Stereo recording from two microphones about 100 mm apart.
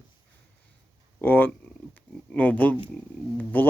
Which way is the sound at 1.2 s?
20° left (ahead or behind).